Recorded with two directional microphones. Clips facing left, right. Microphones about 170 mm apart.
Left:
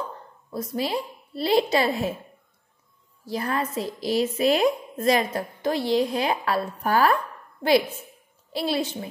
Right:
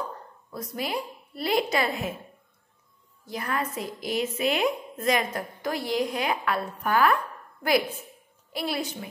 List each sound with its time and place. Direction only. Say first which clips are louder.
0.5 s a woman's voice: left 5 dB; 30° left (ahead or behind)
3.3 s a woman's voice: left 3 dB; 30° left (ahead or behind)
8.5 s a woman's voice: left 4 dB; 30° left (ahead or behind)